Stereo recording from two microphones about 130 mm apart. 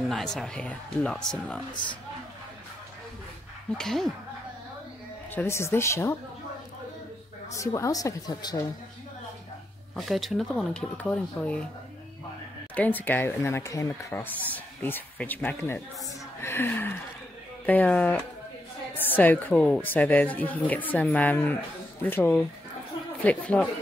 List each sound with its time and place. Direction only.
0.1 s speech: 5° left (ahead or behind)
3.7 s speech: 5° left (ahead or behind)
5.3 s a woman's voice: 15° left (ahead or behind)
7.5 s a woman's voice: 25° left (ahead or behind)
9.9 s speech: centre (ahead or behind)
12.7 s speech: 15° left (ahead or behind)